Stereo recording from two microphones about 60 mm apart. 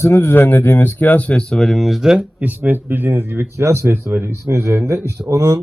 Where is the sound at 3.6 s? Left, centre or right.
Right.